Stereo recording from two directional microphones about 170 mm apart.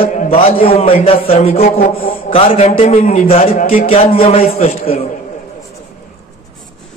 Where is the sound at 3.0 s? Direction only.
55° left (ahead or behind).